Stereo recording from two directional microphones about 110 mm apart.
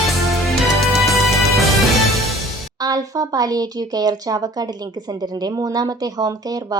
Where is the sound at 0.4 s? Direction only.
Centre (ahead or behind).